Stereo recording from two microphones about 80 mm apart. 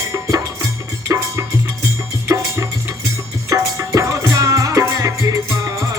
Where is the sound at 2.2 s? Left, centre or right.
Right.